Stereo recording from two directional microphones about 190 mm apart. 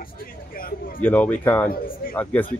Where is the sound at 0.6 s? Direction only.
50° left (ahead or behind).